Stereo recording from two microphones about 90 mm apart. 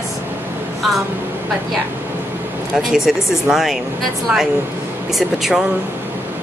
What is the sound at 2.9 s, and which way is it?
Speech, 5° right (ahead or behind).